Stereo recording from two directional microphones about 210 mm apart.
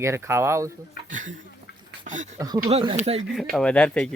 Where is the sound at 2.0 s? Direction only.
35° right (ahead or behind).